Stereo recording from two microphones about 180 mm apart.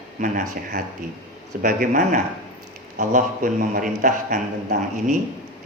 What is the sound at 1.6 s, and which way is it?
A man's voice, 50° right (ahead or behind).